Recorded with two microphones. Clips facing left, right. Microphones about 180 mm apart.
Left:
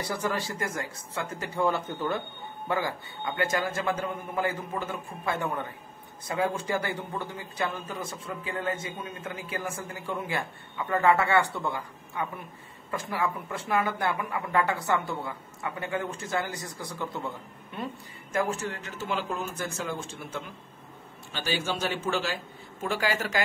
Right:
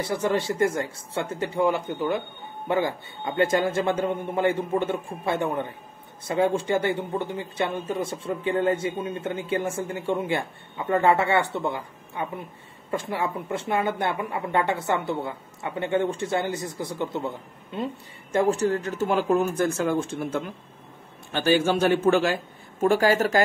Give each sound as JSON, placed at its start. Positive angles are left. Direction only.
{"t": 0.1, "sound": "speech", "side_deg": -25}
{"t": 1.6, "sound": "a man's voice", "side_deg": -15}
{"t": 2.7, "sound": "speech", "side_deg": -25}
{"t": 18.3, "sound": "a man's voice", "side_deg": -35}